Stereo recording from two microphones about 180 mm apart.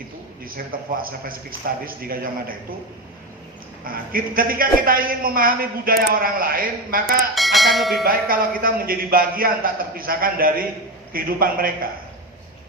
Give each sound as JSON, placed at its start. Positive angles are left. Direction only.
{"t": 0.4, "sound": "a man's voice", "side_deg": -55}
{"t": 3.8, "sound": "a man's voice", "side_deg": -55}
{"t": 7.3, "sound": "speech", "side_deg": 0}
{"t": 8.0, "sound": "a man's voice", "side_deg": -55}